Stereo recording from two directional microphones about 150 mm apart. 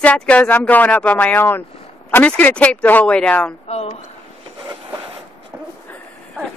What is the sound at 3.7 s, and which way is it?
Speech, 40° left (ahead or behind).